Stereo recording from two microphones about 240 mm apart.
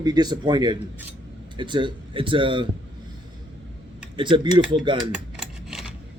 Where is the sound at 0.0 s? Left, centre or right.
Centre.